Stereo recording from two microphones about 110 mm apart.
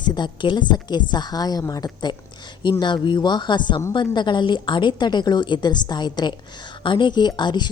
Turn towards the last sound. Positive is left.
turn(degrees=45)  # may be behind; listen again after turning